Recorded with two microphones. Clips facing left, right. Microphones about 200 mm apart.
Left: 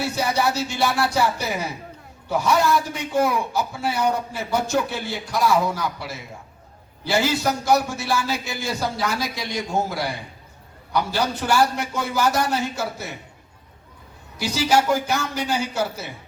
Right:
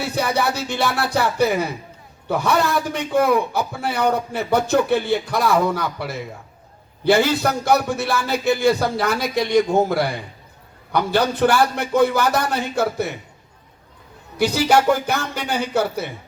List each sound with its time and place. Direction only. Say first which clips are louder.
0.2 s a man's voice: right 2 dB; 60° right (ahead or behind)
14.3 s a man's voice: right 4 dB; 55° right (ahead or behind)